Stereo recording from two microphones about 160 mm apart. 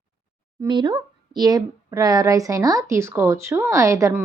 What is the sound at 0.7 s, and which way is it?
A woman's voice, 30° right (ahead or behind).